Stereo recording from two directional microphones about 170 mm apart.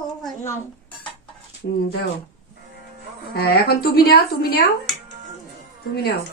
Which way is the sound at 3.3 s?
65° left (ahead or behind).